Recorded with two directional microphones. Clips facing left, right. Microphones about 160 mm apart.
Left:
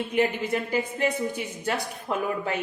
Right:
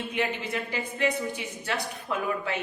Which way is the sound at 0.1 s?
45° left (ahead or behind).